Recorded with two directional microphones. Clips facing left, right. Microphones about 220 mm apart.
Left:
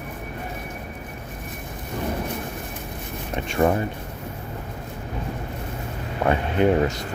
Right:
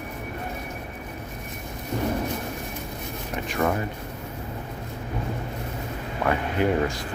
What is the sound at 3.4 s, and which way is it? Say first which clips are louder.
Speech: left 5 dB; 25° left (ahead or behind).